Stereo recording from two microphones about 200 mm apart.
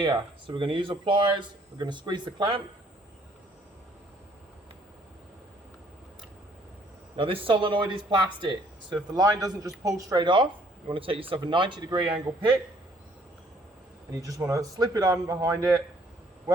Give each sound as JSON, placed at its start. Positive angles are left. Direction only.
{"t": 0.0, "sound": "speech", "side_deg": -25}
{"t": 7.2, "sound": "speech", "side_deg": -25}
{"t": 14.1, "sound": "speech", "side_deg": -15}